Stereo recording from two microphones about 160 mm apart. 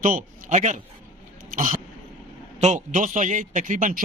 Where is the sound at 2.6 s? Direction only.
50° right (ahead or behind).